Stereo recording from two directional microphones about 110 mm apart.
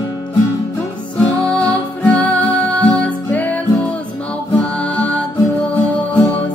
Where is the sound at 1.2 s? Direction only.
10° left (ahead or behind).